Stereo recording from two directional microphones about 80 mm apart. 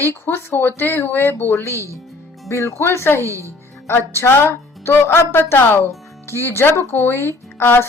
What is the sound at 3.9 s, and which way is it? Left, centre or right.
Speech, left.